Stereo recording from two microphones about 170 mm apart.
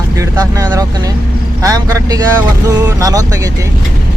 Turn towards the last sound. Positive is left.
turn(degrees=-20)  # may be behind; listen again after turning